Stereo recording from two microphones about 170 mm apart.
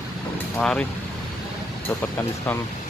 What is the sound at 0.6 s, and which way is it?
Speech, 5° left (ahead or behind).